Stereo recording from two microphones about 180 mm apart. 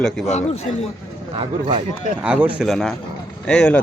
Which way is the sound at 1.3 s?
30° right (ahead or behind).